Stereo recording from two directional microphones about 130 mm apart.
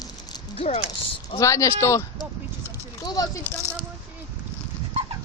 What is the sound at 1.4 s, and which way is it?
Speech, 25° left (ahead or behind).